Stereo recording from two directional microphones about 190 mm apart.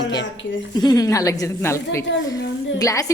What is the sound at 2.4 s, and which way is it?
Speech, 75° left (ahead or behind).